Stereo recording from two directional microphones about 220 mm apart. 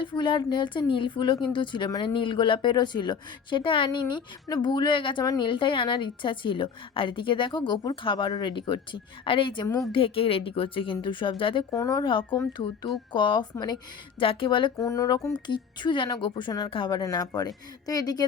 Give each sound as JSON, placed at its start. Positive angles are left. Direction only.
{"t": 0.0, "sound": "speech", "side_deg": 20}